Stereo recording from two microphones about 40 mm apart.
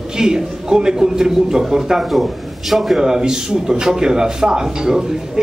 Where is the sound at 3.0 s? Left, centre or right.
Centre.